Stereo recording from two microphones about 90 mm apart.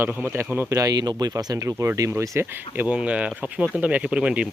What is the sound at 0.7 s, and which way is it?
Speech, 45° right (ahead or behind).